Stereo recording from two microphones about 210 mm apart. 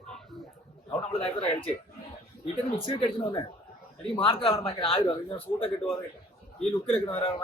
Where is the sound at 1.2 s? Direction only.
30° left (ahead or behind).